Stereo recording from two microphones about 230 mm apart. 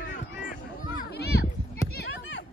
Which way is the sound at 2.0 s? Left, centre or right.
Left.